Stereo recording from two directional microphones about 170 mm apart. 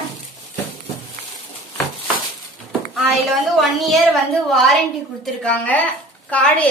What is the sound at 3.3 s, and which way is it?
A woman's voice, centre (ahead or behind).